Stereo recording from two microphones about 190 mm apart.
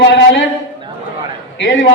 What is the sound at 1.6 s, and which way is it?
Speech, 80° left.